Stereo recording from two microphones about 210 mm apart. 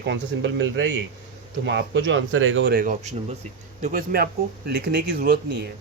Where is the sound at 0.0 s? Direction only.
60° right (ahead or behind).